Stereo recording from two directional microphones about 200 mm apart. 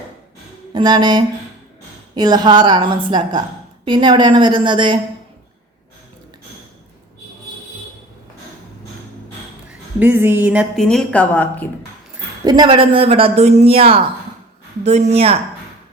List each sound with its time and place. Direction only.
0.7 s speech: 20° right (ahead or behind)
10.0 s a woman's voice: 10° right (ahead or behind); by 11.7 s 10° left (ahead or behind)
12.5 s speech: 20° right (ahead or behind)